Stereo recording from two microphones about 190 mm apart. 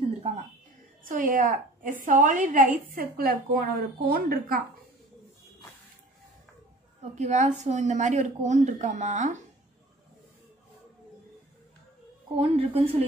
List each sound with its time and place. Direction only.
1.0 s a woman's voice: 45° right (ahead or behind)
7.2 s a woman's voice: 40° right (ahead or behind)
12.4 s a woman's voice: 30° right (ahead or behind)